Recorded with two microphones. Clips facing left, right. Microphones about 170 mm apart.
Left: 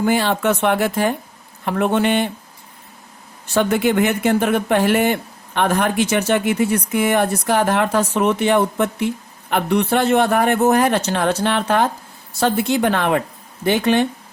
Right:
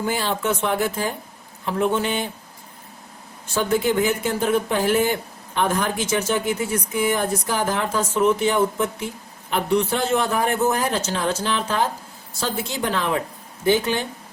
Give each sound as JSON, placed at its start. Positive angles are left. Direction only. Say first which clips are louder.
{"t": 0.0, "sound": "speech", "louder": "left 6 dB", "side_deg": 70}
{"t": 3.5, "sound": "speech", "louder": "left 4 dB", "side_deg": 70}